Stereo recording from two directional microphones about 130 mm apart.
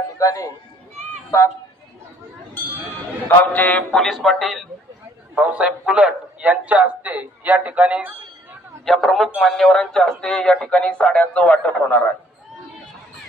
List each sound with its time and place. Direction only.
0.2 s speech: 25° left (ahead or behind)
3.3 s a man's voice: 10° left (ahead or behind)
5.3 s a man's voice: 10° right (ahead or behind)
8.8 s a man's voice: centre (ahead or behind)